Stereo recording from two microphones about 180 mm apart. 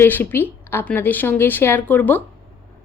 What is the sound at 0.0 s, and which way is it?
A woman's voice, 10° left (ahead or behind).